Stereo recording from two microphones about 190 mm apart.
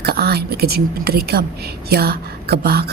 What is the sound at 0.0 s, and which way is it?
A woman's voice, 55° right (ahead or behind).